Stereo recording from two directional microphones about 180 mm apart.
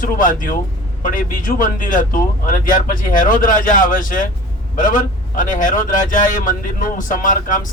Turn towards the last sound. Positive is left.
turn(degrees=45)  # may be behind; listen again after turning